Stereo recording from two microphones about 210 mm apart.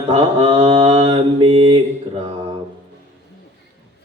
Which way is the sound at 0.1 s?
30° right (ahead or behind).